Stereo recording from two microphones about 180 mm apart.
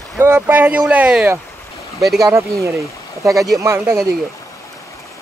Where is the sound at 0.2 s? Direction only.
10° right (ahead or behind).